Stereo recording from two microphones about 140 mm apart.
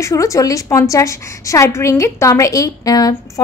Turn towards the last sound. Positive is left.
turn(degrees=25)  # may be behind; listen again after turning